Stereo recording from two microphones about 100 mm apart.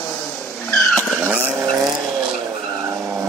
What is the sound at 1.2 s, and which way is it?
Vehicle, 15° right (ahead or behind).